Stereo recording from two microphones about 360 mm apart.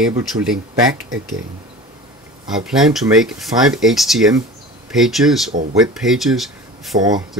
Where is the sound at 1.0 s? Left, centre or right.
Right.